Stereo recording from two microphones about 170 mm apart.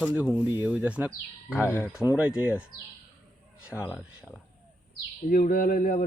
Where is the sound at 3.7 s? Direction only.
15° left (ahead or behind).